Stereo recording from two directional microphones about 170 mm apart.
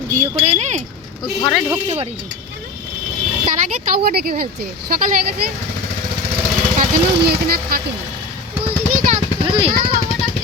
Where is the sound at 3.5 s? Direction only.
60° right (ahead or behind).